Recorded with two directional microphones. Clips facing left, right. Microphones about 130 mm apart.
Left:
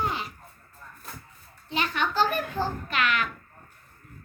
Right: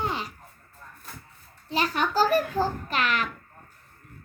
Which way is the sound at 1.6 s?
40° right (ahead or behind).